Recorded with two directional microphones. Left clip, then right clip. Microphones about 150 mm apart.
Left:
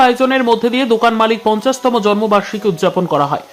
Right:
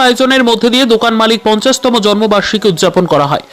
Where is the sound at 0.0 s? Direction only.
30° right (ahead or behind).